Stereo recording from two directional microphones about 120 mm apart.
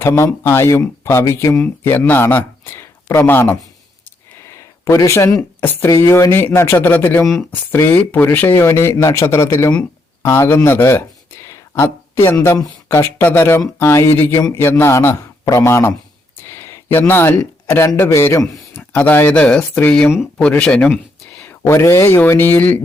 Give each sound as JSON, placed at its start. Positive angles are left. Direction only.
{"t": 0.0, "sound": "speech", "side_deg": 20}
{"t": 7.3, "sound": "speech", "side_deg": 25}
{"t": 7.9, "sound": "speech", "side_deg": 15}
{"t": 11.4, "sound": "a sound", "side_deg": 25}
{"t": 12.9, "sound": "speech", "side_deg": 20}